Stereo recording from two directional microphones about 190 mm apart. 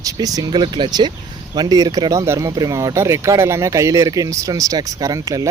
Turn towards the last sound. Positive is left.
turn(degrees=-15)  # may be behind; listen again after turning